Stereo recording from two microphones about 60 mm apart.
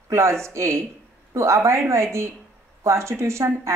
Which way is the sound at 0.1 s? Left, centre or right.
Right.